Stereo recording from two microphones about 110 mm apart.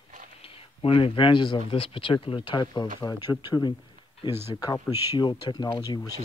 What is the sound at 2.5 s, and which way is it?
Speech, 40° left (ahead or behind).